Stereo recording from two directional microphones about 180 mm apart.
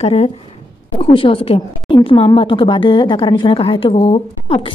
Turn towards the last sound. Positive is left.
turn(degrees=30)  # may be behind; listen again after turning